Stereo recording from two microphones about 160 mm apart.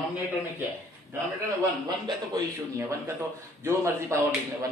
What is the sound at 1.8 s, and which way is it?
A man's voice, 25° right (ahead or behind).